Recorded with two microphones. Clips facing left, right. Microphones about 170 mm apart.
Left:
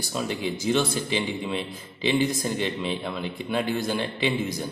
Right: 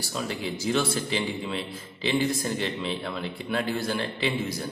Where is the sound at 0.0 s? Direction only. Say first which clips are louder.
Left 3 dB; 20° left (ahead or behind).